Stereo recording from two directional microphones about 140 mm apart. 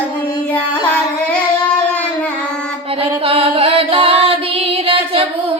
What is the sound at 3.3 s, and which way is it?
Music, 45° right (ahead or behind).